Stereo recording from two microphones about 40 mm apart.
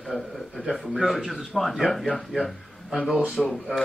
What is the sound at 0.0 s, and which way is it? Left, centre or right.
A man's voice, centre.